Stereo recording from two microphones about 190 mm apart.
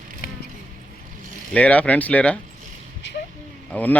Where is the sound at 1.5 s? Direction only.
5° left (ahead or behind).